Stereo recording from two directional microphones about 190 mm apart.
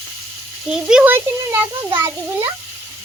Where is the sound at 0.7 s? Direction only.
5° right (ahead or behind).